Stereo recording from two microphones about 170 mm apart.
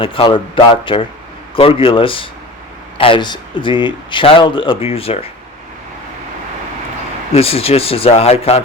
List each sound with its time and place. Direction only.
0.0 s speech: 30° left (ahead or behind)
7.3 s speech: 35° left (ahead or behind)